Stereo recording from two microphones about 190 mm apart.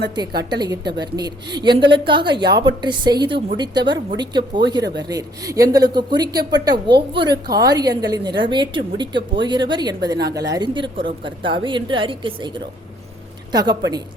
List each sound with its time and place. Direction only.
0.5 s a woman's voice: 20° right (ahead or behind)